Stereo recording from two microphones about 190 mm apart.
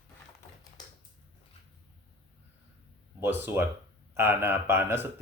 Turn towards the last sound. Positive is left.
turn(degrees=-10)  # may be behind; listen again after turning